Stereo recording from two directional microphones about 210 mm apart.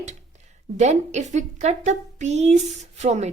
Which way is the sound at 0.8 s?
35° right (ahead or behind).